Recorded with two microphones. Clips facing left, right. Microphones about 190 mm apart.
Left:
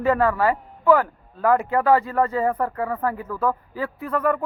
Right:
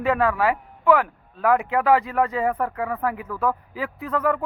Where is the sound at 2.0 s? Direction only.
15° right (ahead or behind).